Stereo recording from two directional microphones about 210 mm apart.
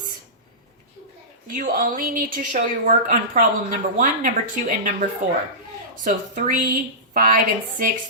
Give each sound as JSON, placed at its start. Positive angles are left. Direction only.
{"t": 1.5, "sound": "a woman's voice", "side_deg": -40}
{"t": 6.1, "sound": "a woman's voice", "side_deg": -40}